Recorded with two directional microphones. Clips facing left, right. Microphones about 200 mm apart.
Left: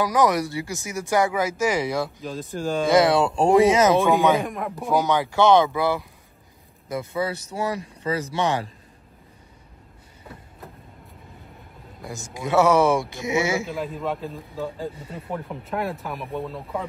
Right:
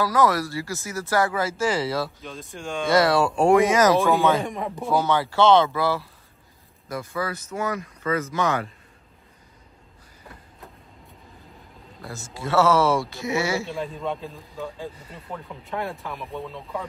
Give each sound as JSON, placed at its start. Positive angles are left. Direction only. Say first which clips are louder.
{"t": 0.0, "sound": "speech", "louder": "left 1 dB", "side_deg": 15}
{"t": 2.2, "sound": "a man's voice", "louder": "left 7 dB", "side_deg": 0}
{"t": 2.9, "sound": "speech", "louder": "left 1 dB", "side_deg": 20}
{"t": 4.1, "sound": "speech", "louder": "left 1 dB", "side_deg": 15}
{"t": 4.4, "sound": "a man's voice", "louder": "even", "side_deg": 0}
{"t": 4.8, "sound": "speech", "louder": "left 1 dB", "side_deg": 15}
{"t": 12.0, "sound": "speech", "louder": "left 2 dB", "side_deg": 15}
{"t": 13.7, "sound": "a man's voice", "louder": "left 1 dB", "side_deg": 0}
{"t": 15.0, "sound": "speech", "louder": "left 5 dB", "side_deg": 25}
{"t": 15.6, "sound": "a man's voice", "louder": "even", "side_deg": 0}